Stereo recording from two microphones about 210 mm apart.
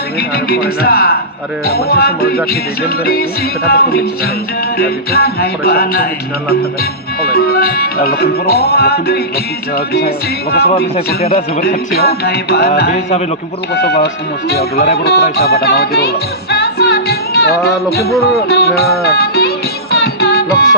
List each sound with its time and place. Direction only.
0.2 s music: 45° left (ahead or behind)
7.2 s music: 45° left (ahead or behind)
12.9 s a man's voice: 35° left (ahead or behind)
13.8 s music: 50° left (ahead or behind)